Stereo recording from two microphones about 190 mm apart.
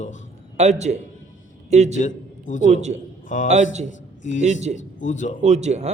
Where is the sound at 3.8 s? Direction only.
40° left (ahead or behind).